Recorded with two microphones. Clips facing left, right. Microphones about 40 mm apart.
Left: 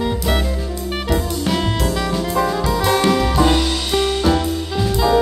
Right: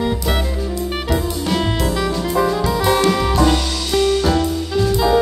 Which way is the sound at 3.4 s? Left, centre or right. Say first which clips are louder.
Left 1 dB; centre.